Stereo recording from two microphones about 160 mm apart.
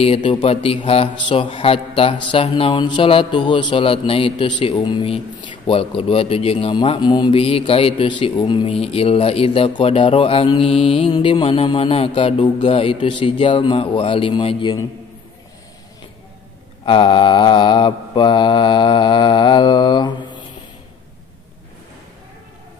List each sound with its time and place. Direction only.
0.0 s speech: 35° left (ahead or behind)
16.8 s mantra: 30° left (ahead or behind)